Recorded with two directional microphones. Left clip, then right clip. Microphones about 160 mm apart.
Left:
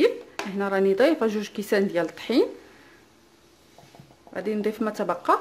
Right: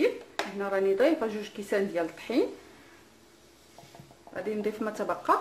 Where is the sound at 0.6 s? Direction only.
45° left (ahead or behind).